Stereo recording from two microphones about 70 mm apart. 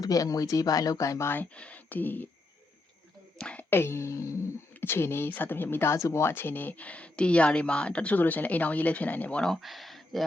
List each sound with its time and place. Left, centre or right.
0.0 s speech: left
1.3 s speech: left
3.3 s speech: centre
3.7 s speech: left
4.8 s speech: left
9.4 s speech: centre